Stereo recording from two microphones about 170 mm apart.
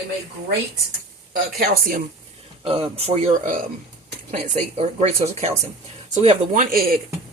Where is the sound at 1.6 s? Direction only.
55° right (ahead or behind).